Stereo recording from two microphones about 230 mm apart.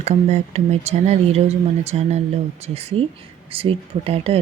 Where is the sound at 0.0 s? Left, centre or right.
Right.